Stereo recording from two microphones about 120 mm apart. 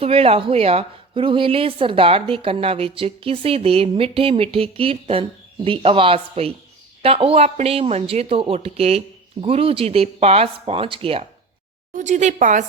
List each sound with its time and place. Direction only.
0.0 s a woman's voice: 55° right (ahead or behind)
11.9 s a woman's voice: 90° right